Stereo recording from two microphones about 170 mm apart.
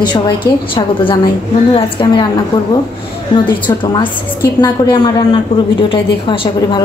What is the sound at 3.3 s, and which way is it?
A woman's voice, 25° left (ahead or behind).